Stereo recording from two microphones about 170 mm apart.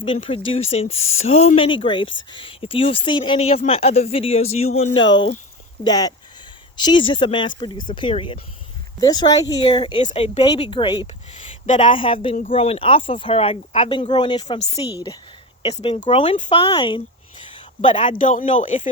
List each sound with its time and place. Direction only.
0.0 s speech: 35° left (ahead or behind)
5.8 s speech: 20° left (ahead or behind)
14.4 s speech: 40° left (ahead or behind)
18.2 s speech: 50° left (ahead or behind)